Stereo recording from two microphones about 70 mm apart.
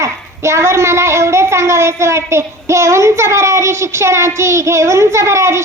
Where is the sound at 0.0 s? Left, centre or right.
Right.